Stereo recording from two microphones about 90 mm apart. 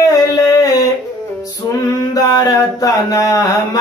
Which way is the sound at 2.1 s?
40° left (ahead or behind).